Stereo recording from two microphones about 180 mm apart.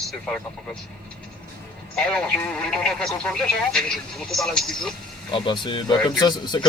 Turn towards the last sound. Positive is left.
turn(degrees=25)  # may be behind; listen again after turning